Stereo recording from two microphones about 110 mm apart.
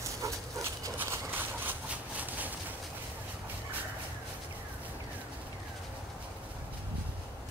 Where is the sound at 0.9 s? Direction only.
15° right (ahead or behind).